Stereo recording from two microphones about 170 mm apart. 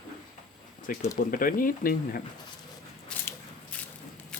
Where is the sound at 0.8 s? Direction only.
50° left (ahead or behind).